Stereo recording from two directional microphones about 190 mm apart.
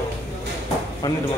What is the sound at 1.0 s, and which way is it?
Speech, 15° left (ahead or behind).